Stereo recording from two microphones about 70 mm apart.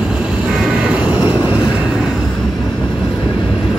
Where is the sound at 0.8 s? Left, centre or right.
Centre.